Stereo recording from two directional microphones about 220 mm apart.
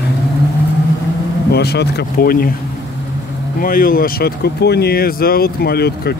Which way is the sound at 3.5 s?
40° left (ahead or behind).